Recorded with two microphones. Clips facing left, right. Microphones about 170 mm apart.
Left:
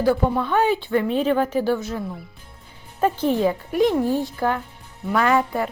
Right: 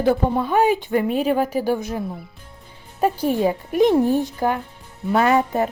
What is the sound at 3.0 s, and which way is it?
Speech, 10° right (ahead or behind).